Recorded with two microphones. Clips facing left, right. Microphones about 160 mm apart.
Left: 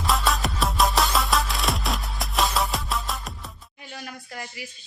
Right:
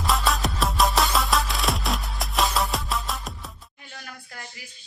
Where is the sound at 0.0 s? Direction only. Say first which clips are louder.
Even; centre (ahead or behind).